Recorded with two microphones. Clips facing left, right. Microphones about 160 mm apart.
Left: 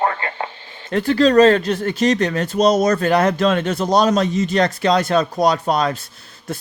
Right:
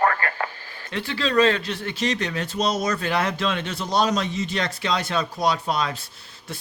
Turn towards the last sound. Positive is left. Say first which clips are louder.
# left 6 dB
turn(degrees=45)  # may be behind; listen again after turning